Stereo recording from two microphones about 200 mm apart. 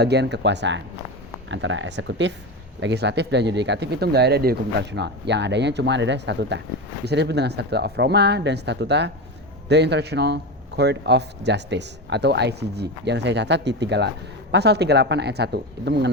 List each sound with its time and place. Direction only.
0.0 s a man's voice: 55° right (ahead or behind)